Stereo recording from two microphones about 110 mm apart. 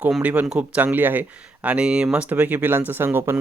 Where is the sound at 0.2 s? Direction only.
15° right (ahead or behind).